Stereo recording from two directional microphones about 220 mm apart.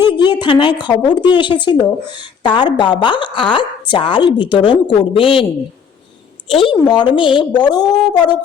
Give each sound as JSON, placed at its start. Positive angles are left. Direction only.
{"t": 0.1, "sound": "a woman's voice", "side_deg": 20}
{"t": 6.5, "sound": "a woman's voice", "side_deg": 25}